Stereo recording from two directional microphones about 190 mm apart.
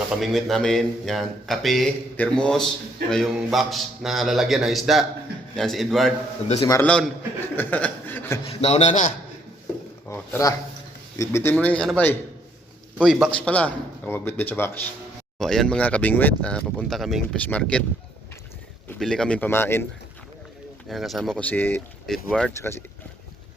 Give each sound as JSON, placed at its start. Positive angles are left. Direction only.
{"t": 0.1, "sound": "speech", "side_deg": 0}
{"t": 6.6, "sound": "speech", "side_deg": 20}
{"t": 6.8, "sound": "a man's voice", "side_deg": 5}
{"t": 8.4, "sound": "a man's voice", "side_deg": 35}
{"t": 10.1, "sound": "speech", "side_deg": 15}
{"t": 18.9, "sound": "speech", "side_deg": 5}
{"t": 20.8, "sound": "speech", "side_deg": 0}